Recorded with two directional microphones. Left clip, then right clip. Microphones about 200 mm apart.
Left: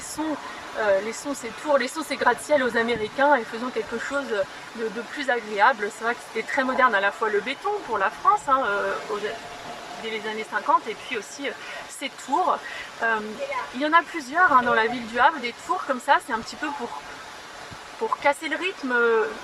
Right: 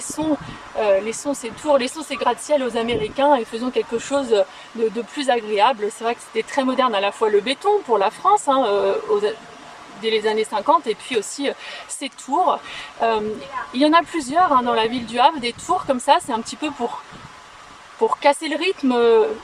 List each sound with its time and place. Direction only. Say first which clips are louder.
0.8 s speech: right 4 dB; 10° right (ahead or behind)
18.2 s speech: right 3 dB; 15° right (ahead or behind)